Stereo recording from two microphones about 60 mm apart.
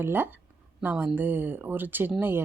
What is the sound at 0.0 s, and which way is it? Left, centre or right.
Speech, right.